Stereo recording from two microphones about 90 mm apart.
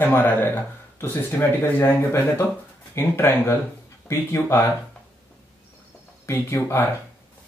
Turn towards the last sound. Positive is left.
turn(degrees=30)  # may be behind; listen again after turning